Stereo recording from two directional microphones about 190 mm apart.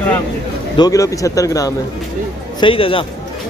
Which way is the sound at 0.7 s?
20° left (ahead or behind).